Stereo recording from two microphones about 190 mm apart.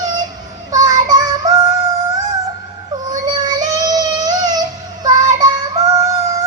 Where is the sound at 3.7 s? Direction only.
20° right (ahead or behind).